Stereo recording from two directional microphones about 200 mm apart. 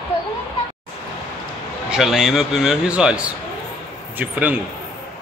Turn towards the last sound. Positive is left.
turn(degrees=-10)  # may be behind; listen again after turning